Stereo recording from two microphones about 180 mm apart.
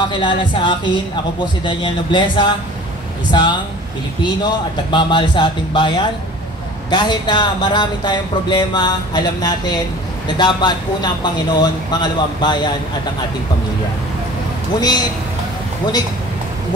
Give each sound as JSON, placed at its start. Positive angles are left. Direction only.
{"t": 0.0, "sound": "speech", "side_deg": 25}
{"t": 4.9, "sound": "speech", "side_deg": 25}
{"t": 14.8, "sound": "speech", "side_deg": 20}